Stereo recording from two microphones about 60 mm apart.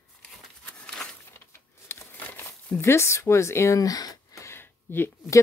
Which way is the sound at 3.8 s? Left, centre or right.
Left.